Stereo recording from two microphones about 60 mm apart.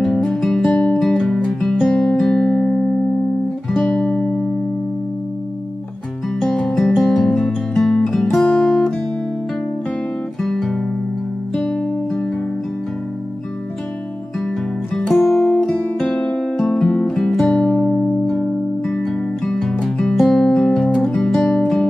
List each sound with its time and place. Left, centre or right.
0.0 s music: centre
0.3 s music: centre
6.4 s music: centre
8.5 s music: centre
10.4 s guitar: centre
11.5 s music: centre
15.1 s music: centre